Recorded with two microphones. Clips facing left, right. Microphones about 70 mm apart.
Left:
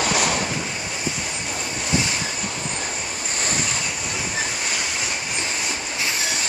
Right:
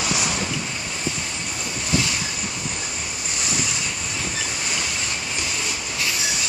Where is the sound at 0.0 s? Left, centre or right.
Left.